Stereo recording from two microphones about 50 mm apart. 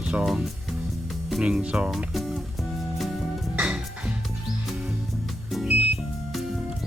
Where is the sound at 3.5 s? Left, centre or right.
Centre.